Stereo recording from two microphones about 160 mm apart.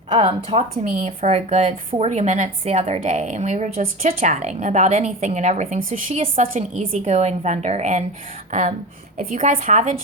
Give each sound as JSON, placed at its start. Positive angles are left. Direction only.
{"t": 0.1, "sound": "speech", "side_deg": -35}
{"t": 0.9, "sound": "a woman's voice", "side_deg": -50}
{"t": 9.1, "sound": "a woman's voice", "side_deg": -55}